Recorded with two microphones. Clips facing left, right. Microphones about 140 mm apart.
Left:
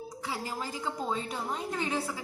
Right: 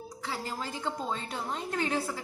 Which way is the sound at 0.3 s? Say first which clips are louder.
Even; 5° left (ahead or behind).